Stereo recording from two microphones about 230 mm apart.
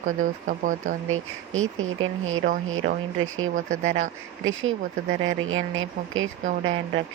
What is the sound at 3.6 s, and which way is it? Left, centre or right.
Speech, right.